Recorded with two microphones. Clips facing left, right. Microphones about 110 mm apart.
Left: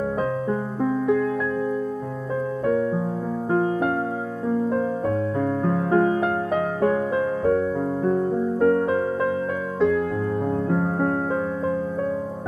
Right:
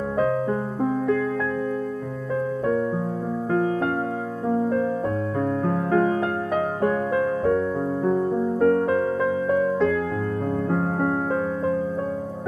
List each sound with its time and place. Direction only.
3.5 s music: 25° left (ahead or behind)
5.9 s music: 20° left (ahead or behind)
8.6 s music: 20° left (ahead or behind)